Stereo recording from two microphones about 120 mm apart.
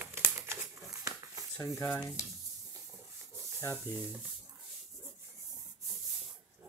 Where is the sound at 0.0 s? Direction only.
20° right (ahead or behind).